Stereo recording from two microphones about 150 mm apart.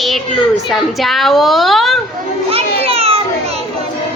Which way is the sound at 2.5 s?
40° right (ahead or behind).